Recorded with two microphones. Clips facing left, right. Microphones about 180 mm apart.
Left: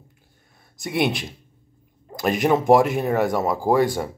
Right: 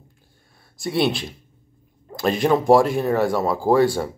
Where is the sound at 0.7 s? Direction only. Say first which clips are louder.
Right 2 dB; 15° left (ahead or behind).